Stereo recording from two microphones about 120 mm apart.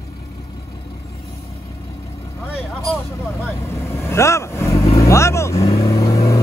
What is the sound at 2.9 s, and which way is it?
Vehicle, 25° left (ahead or behind).